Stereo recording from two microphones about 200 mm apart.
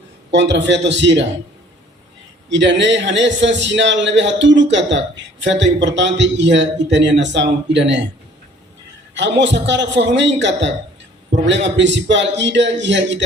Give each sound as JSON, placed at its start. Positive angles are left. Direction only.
{"t": 0.3, "sound": "a man's voice", "side_deg": -60}
{"t": 2.5, "sound": "a man's voice", "side_deg": -60}
{"t": 9.1, "sound": "a man's voice", "side_deg": -65}